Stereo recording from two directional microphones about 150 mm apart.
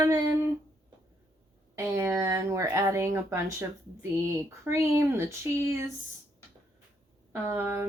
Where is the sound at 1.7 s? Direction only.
20° right (ahead or behind).